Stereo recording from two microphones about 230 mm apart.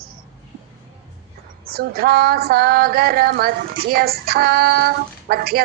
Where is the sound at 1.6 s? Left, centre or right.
Right.